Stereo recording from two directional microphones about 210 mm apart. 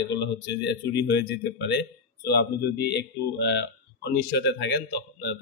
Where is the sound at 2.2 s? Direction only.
50° left (ahead or behind).